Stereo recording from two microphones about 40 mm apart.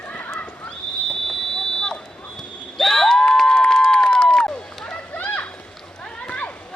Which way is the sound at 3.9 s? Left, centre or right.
Left.